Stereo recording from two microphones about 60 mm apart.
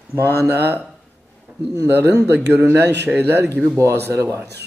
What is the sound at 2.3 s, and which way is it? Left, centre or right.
Speech, right.